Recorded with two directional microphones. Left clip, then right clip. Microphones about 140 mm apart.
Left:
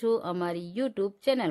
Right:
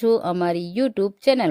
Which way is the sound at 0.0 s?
45° right (ahead or behind).